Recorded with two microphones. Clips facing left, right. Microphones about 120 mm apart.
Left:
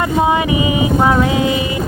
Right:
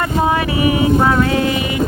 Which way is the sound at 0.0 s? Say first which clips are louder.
Left 2 dB; 20° left (ahead or behind).